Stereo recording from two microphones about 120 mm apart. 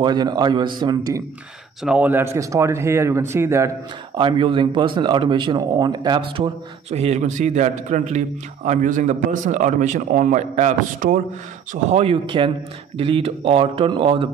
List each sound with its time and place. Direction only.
0.0 s speech: 35° right (ahead or behind)
1.8 s speech: 10° right (ahead or behind)
4.1 s speech: 45° right (ahead or behind)
6.9 s a man's voice: 65° right (ahead or behind); by 10.7 s 90° right
12.0 s speech: 50° right (ahead or behind)